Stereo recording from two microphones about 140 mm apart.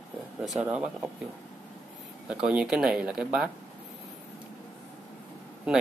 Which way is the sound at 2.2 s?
5° right (ahead or behind).